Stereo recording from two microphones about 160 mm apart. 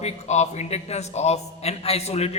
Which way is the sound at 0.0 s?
45° left (ahead or behind).